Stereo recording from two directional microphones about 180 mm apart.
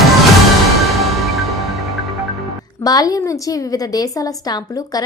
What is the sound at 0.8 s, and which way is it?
Music, centre (ahead or behind).